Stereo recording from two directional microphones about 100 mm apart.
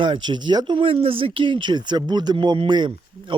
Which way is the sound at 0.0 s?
50° right (ahead or behind).